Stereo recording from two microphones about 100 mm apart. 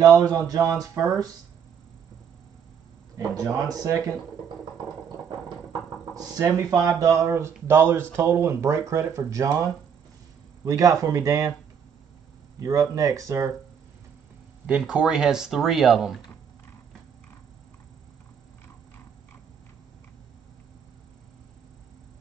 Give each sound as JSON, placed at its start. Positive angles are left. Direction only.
{"t": 0.5, "sound": "speech", "side_deg": -35}
{"t": 3.2, "sound": "speech", "side_deg": -40}
{"t": 6.4, "sound": "speech", "side_deg": -35}
{"t": 12.5, "sound": "speech", "side_deg": -35}
{"t": 14.7, "sound": "speech", "side_deg": -10}